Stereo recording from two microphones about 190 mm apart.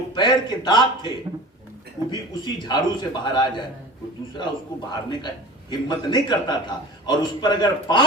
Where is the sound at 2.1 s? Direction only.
20° left (ahead or behind).